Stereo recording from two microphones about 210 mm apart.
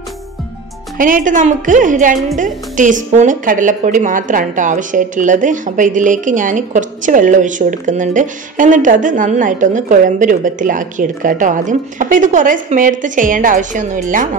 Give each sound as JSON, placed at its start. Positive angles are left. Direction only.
{"t": 0.9, "sound": "a woman's voice", "side_deg": -40}